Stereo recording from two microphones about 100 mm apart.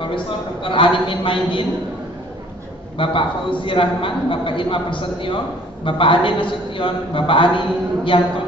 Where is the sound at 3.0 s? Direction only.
60° left (ahead or behind).